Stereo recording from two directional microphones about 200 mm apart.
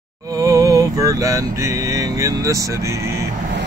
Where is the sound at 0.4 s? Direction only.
15° right (ahead or behind).